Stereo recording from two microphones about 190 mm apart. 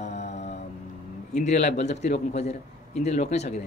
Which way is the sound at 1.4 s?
35° left (ahead or behind).